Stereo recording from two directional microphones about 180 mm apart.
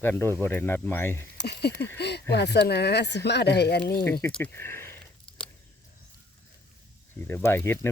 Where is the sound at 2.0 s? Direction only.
65° left (ahead or behind).